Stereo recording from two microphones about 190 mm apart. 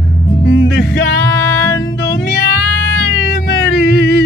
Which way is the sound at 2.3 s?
65° left (ahead or behind).